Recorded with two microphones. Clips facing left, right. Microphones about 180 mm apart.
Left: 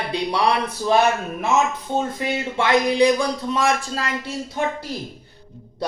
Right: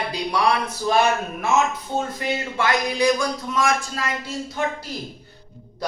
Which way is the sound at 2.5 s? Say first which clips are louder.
Left 6 dB; 30° left (ahead or behind).